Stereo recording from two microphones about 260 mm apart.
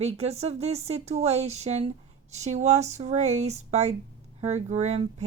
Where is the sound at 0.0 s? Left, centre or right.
Right.